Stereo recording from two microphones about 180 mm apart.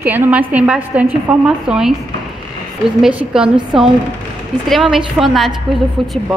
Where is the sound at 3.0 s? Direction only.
5° right (ahead or behind).